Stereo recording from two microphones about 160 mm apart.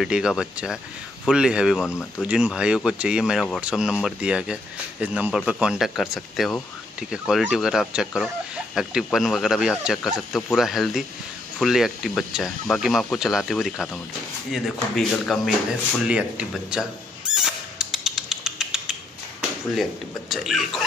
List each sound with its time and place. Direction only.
0.0 s speech: 5° right (ahead or behind)
1.9 s speech: 15° left (ahead or behind)
2.2 s speech: 5° right (ahead or behind)
17.3 s rodents: 5° right (ahead or behind)
19.8 s speech: centre (ahead or behind)